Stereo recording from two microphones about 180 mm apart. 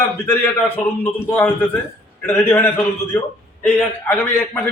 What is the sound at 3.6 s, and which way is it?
A man's voice, 10° left (ahead or behind).